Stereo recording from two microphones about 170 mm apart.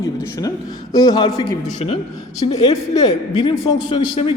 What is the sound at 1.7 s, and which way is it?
Speech, 35° left (ahead or behind).